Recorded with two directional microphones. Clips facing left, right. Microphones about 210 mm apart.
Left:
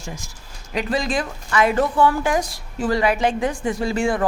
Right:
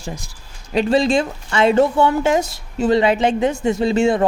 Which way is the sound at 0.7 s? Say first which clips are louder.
Right 7 dB; 30° right (ahead or behind).